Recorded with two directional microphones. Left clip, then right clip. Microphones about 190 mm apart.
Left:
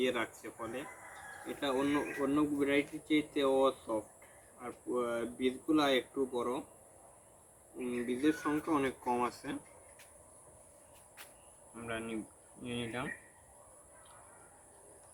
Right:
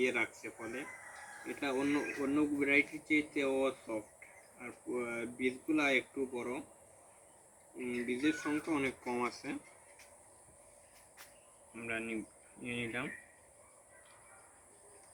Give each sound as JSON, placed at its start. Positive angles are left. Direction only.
{"t": 0.0, "sound": "speech", "side_deg": 10}
{"t": 8.0, "sound": "speech", "side_deg": 5}
{"t": 11.7, "sound": "speech", "side_deg": 15}